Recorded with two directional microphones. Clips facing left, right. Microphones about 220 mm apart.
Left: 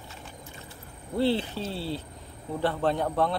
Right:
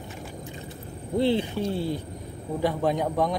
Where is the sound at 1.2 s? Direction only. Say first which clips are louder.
Right 2 dB; 15° right (ahead or behind).